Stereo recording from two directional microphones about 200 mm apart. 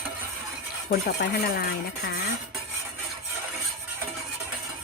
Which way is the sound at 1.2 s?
45° left (ahead or behind).